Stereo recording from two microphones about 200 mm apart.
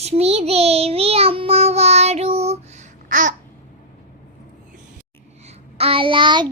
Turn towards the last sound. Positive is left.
turn(degrees=-25)  # may be behind; listen again after turning